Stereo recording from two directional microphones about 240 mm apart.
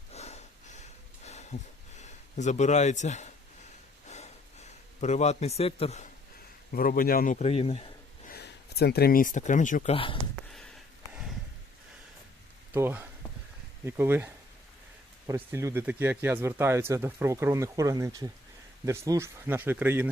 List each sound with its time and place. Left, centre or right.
0.1 s a sound: left
2.0 s speech: left
4.9 s a man's voice: left
6.7 s speech: left
8.3 s speech: left
11.1 s a sound: centre
12.7 s speech: centre
15.3 s speech: centre